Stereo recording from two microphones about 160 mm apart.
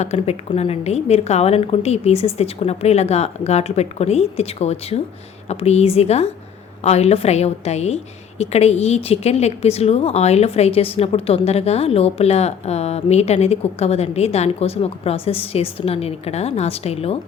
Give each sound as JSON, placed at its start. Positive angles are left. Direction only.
{"t": 0.0, "sound": "a woman's voice", "side_deg": 40}